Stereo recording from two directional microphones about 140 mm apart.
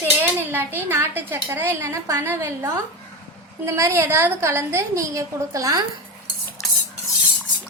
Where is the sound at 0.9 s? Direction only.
15° right (ahead or behind).